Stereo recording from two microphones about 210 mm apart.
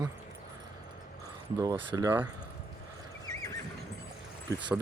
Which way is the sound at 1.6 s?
15° right (ahead or behind).